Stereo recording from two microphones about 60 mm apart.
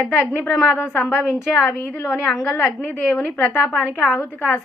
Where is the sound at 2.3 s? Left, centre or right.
Left.